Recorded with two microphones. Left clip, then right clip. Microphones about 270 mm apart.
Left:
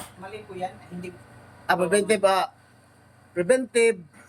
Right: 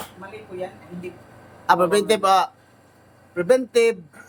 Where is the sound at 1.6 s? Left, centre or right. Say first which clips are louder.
Right 4 dB; centre.